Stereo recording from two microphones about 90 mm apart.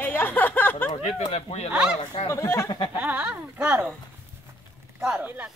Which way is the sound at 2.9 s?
20° right (ahead or behind).